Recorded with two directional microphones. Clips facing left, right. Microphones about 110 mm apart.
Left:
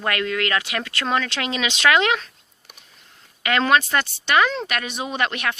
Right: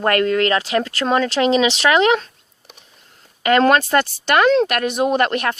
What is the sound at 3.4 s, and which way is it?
Speech, 40° right (ahead or behind).